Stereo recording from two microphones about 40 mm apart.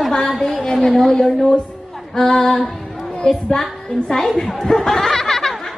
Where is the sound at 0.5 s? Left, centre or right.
Centre.